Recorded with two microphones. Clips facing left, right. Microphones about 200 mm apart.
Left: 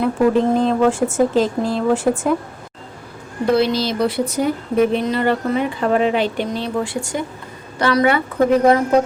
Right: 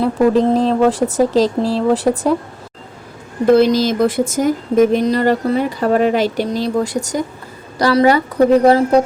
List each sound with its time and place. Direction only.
0.0 s speech: 35° right (ahead or behind)
3.5 s speech: 45° right (ahead or behind)